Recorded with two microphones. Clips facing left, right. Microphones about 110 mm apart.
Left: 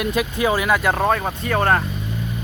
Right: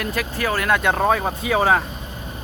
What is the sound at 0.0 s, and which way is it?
Speech, 20° left (ahead or behind).